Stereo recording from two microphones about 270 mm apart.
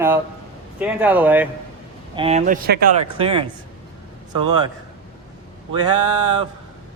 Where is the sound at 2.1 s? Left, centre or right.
Right.